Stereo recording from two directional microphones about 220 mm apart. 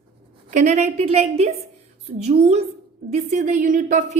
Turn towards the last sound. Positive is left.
turn(degrees=-35)  # may be behind; listen again after turning